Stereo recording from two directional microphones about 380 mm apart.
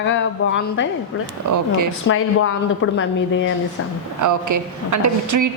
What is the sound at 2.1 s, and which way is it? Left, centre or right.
A woman's voice, left.